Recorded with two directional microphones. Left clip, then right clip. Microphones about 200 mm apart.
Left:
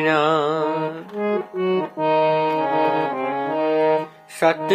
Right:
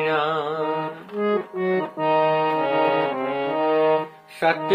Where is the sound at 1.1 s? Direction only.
10° left (ahead or behind).